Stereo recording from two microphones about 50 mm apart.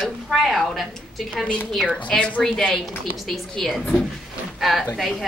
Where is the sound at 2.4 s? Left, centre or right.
Centre.